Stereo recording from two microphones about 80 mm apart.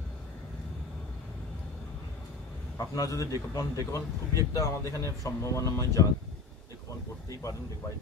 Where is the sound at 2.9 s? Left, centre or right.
Left.